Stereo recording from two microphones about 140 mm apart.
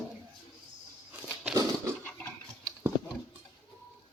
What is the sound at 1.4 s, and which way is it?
Dog, 20° right (ahead or behind).